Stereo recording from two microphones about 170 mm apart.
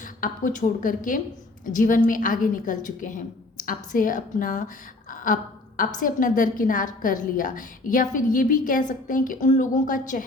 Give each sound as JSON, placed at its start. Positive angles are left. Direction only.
{"t": 0.0, "sound": "a woman's voice", "side_deg": 50}
{"t": 5.1, "sound": "a sound", "side_deg": 50}
{"t": 6.0, "sound": "a woman's voice", "side_deg": 50}